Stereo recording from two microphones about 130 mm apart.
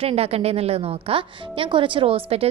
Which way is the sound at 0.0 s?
50° right (ahead or behind).